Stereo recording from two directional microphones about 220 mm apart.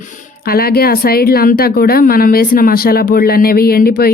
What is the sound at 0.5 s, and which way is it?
Speech, 45° left (ahead or behind).